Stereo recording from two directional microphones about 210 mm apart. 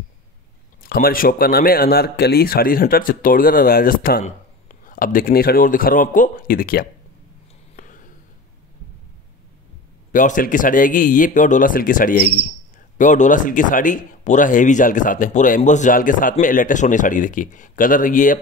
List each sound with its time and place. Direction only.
0.8 s speech: 45° left (ahead or behind)
7.7 s a sound: 40° left (ahead or behind)
10.1 s speech: 40° left (ahead or behind)